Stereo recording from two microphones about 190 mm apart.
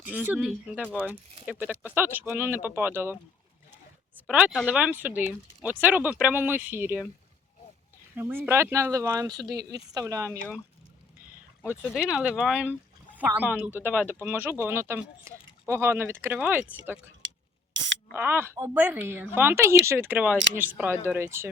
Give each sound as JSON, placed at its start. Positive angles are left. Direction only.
{"t": 0.0, "sound": "speech", "side_deg": -10}
{"t": 4.3, "sound": "speech", "side_deg": -5}
{"t": 8.1, "sound": "speech", "side_deg": -10}
{"t": 11.6, "sound": "speech", "side_deg": 10}
{"t": 11.9, "sound": "speech", "side_deg": -5}
{"t": 18.1, "sound": "speech", "side_deg": -10}